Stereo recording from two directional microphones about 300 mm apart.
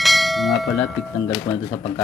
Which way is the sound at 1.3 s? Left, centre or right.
Centre.